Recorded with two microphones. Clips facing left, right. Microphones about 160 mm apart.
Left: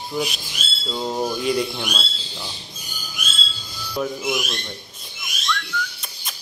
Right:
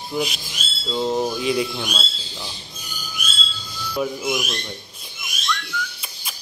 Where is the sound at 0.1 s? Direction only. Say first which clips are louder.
Right 1 dB; 5° right (ahead or behind).